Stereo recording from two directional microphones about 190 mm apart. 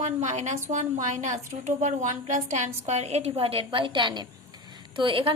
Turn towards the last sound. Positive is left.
turn(degrees=-30)  # may be behind; listen again after turning